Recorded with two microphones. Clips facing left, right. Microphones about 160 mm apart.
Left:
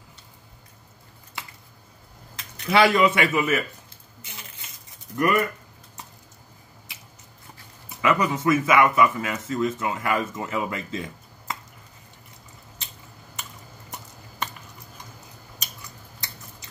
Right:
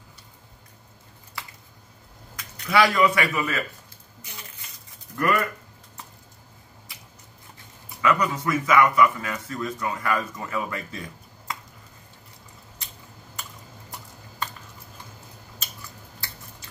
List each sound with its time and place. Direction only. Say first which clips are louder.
2.3 s speech: left 1 dB; 25° left (ahead or behind)
5.1 s speech: left 2 dB; 20° left (ahead or behind)
8.0 s speech: left 1 dB; 20° left (ahead or behind)
13.4 s typing: even; 20° left (ahead or behind)